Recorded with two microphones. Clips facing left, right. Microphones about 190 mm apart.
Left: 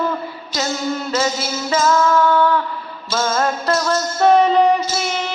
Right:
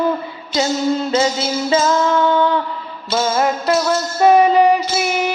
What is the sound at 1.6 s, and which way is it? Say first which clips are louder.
Music: even; 25° right (ahead or behind).